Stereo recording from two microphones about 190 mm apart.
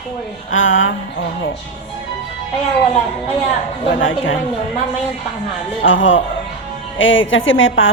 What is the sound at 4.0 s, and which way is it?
Speech, 90° left.